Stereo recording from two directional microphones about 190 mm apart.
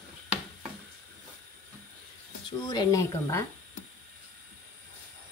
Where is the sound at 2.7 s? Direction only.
20° left (ahead or behind).